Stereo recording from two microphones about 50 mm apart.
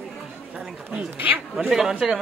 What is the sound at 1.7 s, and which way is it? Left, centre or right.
Speech, centre.